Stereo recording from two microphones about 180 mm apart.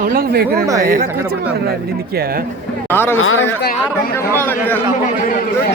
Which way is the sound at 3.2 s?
90° left.